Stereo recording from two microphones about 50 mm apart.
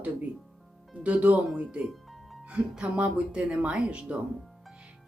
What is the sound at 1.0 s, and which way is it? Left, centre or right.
Speech, right.